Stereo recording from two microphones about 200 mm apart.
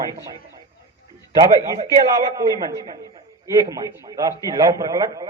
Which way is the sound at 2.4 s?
20° right (ahead or behind).